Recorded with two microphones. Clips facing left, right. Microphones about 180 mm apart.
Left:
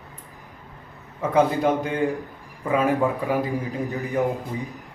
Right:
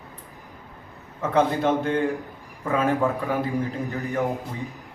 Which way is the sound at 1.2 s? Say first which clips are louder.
Left 2 dB; 10° left (ahead or behind).